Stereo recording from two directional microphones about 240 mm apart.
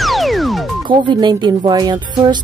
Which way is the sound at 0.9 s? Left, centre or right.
Centre.